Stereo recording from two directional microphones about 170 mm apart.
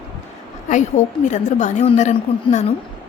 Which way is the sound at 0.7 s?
45° left (ahead or behind).